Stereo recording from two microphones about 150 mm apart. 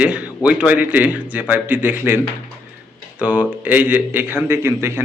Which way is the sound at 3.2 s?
10° right (ahead or behind).